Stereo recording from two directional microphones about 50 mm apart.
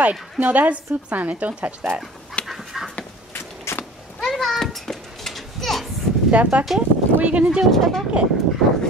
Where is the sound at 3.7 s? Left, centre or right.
Left.